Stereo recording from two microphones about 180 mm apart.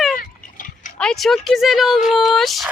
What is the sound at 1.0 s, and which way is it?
Speech, centre (ahead or behind).